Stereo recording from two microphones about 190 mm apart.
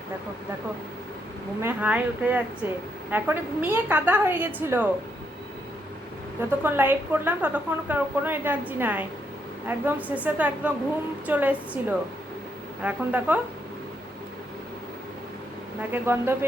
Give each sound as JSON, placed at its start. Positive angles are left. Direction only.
{"t": 1.6, "sound": "a woman's voice", "side_deg": -10}
{"t": 6.6, "sound": "a woman's voice", "side_deg": -10}
{"t": 15.9, "sound": "a woman's voice", "side_deg": -10}